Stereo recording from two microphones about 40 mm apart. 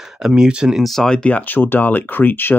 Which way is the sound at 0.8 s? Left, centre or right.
Centre.